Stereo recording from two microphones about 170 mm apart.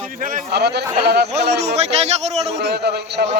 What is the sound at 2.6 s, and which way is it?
Speech, 80° right.